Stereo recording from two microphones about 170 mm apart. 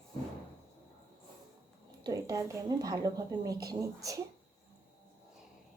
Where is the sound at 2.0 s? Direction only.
20° right (ahead or behind).